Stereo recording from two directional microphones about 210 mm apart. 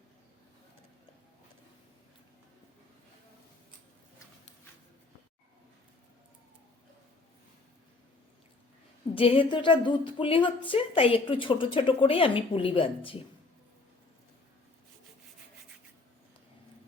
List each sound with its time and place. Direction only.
9.1 s a woman's voice: 25° left (ahead or behind)